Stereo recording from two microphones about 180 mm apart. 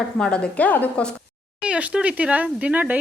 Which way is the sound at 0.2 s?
5° left (ahead or behind).